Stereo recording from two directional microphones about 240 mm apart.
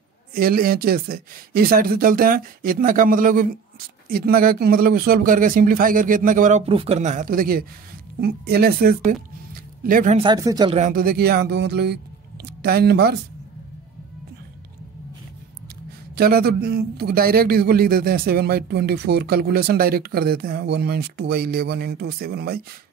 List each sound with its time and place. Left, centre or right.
0.3 s a man's voice: right
10.2 s speech: centre
10.8 s speech: right
16.2 s a man's voice: right